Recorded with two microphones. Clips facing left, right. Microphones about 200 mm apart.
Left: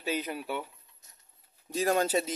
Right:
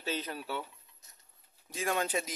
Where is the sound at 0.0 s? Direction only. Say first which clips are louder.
Left 4 dB; 10° left (ahead or behind).